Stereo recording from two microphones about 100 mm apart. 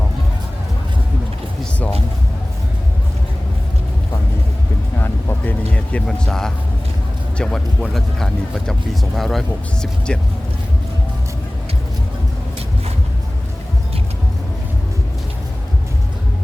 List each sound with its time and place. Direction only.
4.9 s vehicle: 20° left (ahead or behind)
5.7 s music: 10° left (ahead or behind)
7.3 s speech: 5° left (ahead or behind)